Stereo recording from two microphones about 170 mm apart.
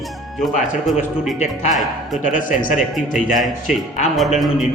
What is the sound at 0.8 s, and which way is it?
A man's voice, centre (ahead or behind).